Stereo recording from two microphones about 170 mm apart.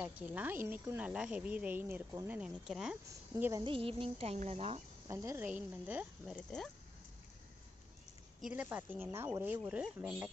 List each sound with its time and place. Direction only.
0.0 s speech: 10° right (ahead or behind)
3.6 s cricket: 30° right (ahead or behind)
5.0 s speech: 15° right (ahead or behind)
6.3 s speech: 5° left (ahead or behind)
8.4 s speech: 10° right (ahead or behind)